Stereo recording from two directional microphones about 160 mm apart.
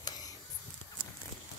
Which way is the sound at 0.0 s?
25° left (ahead or behind).